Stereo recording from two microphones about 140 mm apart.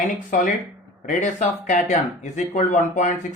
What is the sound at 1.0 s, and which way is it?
Speech, 60° left (ahead or behind).